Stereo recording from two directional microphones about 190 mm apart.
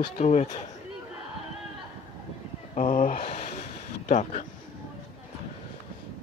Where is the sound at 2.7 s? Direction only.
40° left (ahead or behind).